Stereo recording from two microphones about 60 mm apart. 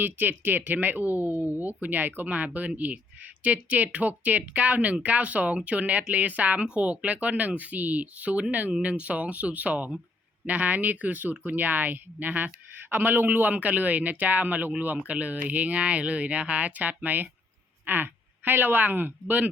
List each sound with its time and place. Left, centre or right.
0.0 s speech: right